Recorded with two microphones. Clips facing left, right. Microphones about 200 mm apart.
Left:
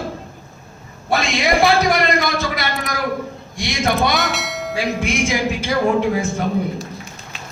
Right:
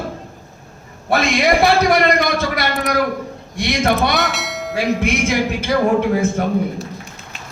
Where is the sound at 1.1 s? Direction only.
55° right (ahead or behind).